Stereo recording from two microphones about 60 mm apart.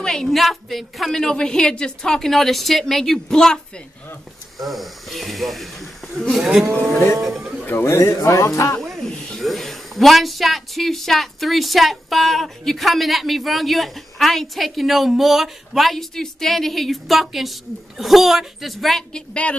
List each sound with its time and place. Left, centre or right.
0.0 s a woman's voice: centre
4.6 s speech: centre
7.8 s speech: left
9.0 s speech: centre
9.4 s speech: centre
19.1 s a woman's voice: centre